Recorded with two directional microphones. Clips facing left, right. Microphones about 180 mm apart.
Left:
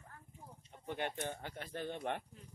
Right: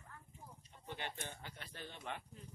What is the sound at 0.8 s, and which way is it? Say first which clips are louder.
Speech: left 7 dB; 50° left (ahead or behind).